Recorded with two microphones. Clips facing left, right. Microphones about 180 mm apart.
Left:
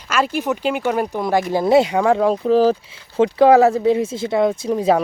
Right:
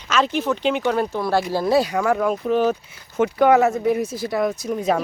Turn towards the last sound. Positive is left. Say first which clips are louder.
# left 4 dB
turn(degrees=30)  # may be behind; listen again after turning